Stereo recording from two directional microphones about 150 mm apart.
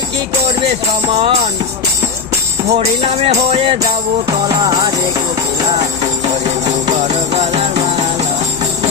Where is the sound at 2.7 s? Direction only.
45° right (ahead or behind).